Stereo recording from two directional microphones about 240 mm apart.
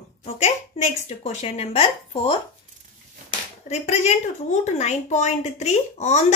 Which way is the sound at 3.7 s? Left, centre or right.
Left.